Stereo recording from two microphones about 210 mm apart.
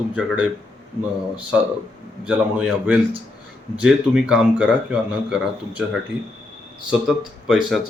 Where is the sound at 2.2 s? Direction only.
5° right (ahead or behind).